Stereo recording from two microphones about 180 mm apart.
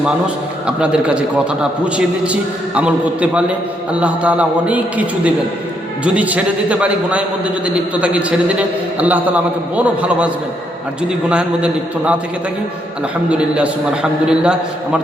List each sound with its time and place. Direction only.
0.8 s a man's voice: 5° right (ahead or behind)
13.3 s a man's voice: 5° right (ahead or behind)